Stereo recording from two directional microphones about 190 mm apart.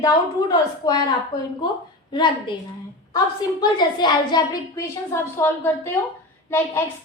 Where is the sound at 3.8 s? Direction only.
25° left (ahead or behind).